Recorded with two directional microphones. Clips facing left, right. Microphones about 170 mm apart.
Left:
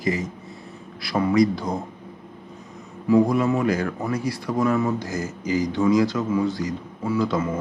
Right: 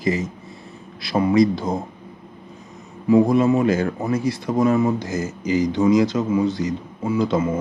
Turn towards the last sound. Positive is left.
turn(degrees=-20)  # may be behind; listen again after turning